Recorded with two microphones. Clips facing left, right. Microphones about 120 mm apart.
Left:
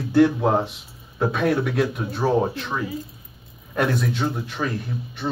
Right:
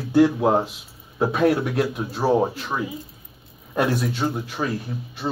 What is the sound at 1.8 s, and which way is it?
Speech, 10° right (ahead or behind).